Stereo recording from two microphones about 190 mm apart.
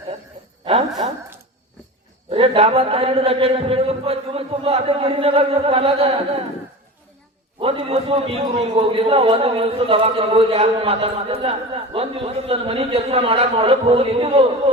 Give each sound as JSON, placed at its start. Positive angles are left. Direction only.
{"t": 0.6, "sound": "a woman's voice", "side_deg": -30}
{"t": 2.3, "sound": "a man's voice", "side_deg": -30}
{"t": 7.6, "sound": "a man's voice", "side_deg": -30}